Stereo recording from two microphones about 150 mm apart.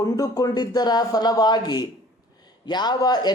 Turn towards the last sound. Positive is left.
turn(degrees=30)  # may be behind; listen again after turning